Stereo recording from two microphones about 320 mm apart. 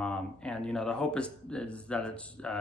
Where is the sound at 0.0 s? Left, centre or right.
Centre.